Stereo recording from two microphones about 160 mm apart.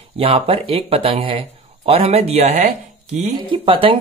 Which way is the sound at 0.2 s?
35° right (ahead or behind).